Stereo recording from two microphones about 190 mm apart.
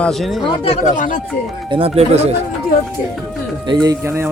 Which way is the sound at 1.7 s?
30° right (ahead or behind).